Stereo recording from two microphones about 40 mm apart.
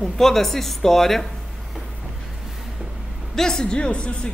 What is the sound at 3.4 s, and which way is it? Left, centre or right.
Speech, centre.